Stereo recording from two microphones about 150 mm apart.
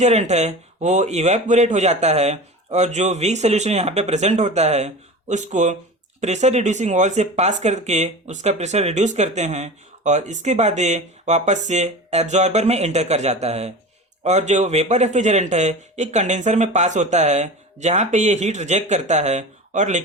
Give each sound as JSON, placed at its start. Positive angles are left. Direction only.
{"t": 0.0, "sound": "speech", "side_deg": -50}